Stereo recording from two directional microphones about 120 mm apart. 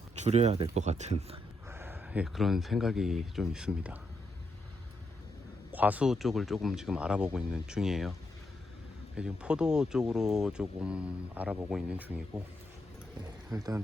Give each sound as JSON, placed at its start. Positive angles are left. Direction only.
{"t": 0.2, "sound": "a man's voice", "side_deg": -65}
{"t": 1.6, "sound": "speech", "side_deg": -20}
{"t": 5.7, "sound": "speech", "side_deg": -15}
{"t": 6.1, "sound": "speech", "side_deg": 0}
{"t": 9.1, "sound": "speech", "side_deg": -10}
{"t": 13.5, "sound": "speech", "side_deg": -30}